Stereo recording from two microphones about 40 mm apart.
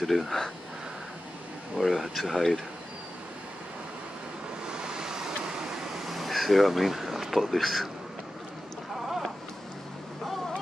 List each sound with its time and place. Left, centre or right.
0.0 s speech: centre
1.8 s speech: centre
4.6 s waves: centre
6.0 s a sound: centre